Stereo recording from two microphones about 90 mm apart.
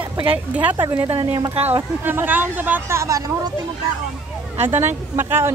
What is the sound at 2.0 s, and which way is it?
Speech, 20° right (ahead or behind).